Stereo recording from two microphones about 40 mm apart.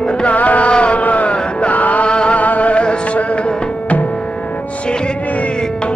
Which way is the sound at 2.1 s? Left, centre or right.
Left.